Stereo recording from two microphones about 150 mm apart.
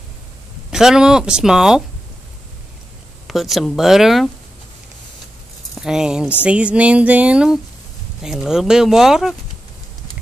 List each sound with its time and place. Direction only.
0.7 s speech: 5° right (ahead or behind)
3.3 s speech: centre (ahead or behind)
5.8 s speech: 5° right (ahead or behind)
6.4 s a sound: 10° right (ahead or behind)
8.2 s speech: 5° right (ahead or behind)